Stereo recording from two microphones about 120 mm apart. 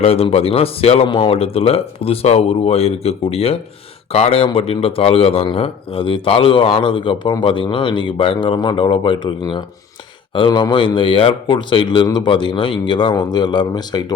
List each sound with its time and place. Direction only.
0.0 s a man's voice: 55° left (ahead or behind); by 14.0 s 40° left (ahead or behind)